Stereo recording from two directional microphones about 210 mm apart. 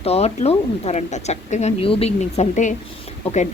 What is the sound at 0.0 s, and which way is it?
A woman's voice, 30° left (ahead or behind).